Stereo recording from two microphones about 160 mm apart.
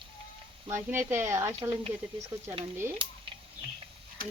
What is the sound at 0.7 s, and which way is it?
Speech, 15° right (ahead or behind).